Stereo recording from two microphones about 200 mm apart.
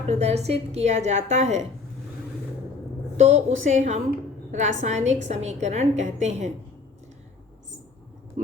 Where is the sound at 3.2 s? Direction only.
35° right (ahead or behind).